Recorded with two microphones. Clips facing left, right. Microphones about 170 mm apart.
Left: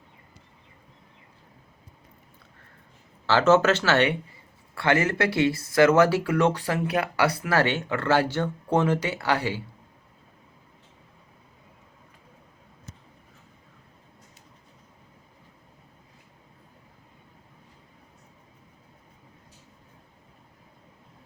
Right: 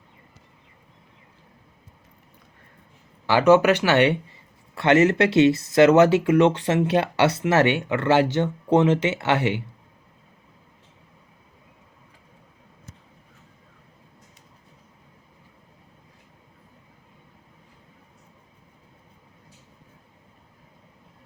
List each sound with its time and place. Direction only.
3.2 s speech: 15° right (ahead or behind)